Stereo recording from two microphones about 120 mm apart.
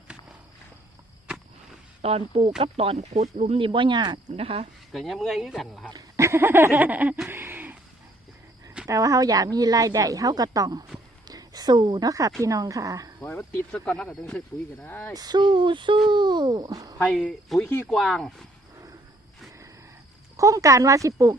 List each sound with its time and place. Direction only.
2.0 s speech: 55° right (ahead or behind)
3.6 s speech: 45° right (ahead or behind)
4.4 s speech: 55° right (ahead or behind)
4.9 s speech: centre (ahead or behind)
5.9 s speech: 25° right (ahead or behind)
7.3 s a sound: 20° right (ahead or behind)
8.9 s a woman's voice: 30° right (ahead or behind)
13.2 s speech: 15° left (ahead or behind)
15.1 s speech: 35° right (ahead or behind)
17.1 s speech: 5° left (ahead or behind)
20.3 s speech: 25° right (ahead or behind)